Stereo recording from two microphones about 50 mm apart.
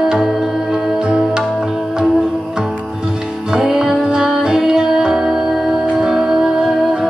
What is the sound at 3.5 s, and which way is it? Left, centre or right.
Music, centre.